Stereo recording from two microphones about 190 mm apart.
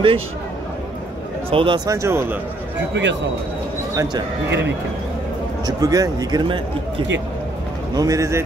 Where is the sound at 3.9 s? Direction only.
15° right (ahead or behind).